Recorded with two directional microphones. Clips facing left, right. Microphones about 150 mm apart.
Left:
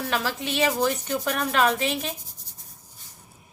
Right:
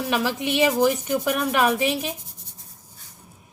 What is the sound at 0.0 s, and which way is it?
Speech, 15° right (ahead or behind).